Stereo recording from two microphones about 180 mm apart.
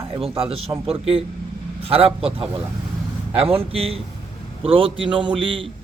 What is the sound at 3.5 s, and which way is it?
A man's voice, 35° right (ahead or behind).